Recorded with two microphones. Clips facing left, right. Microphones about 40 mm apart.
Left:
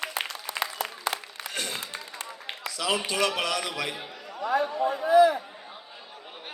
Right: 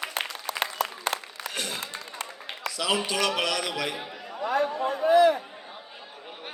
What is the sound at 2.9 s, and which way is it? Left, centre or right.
Speech, left.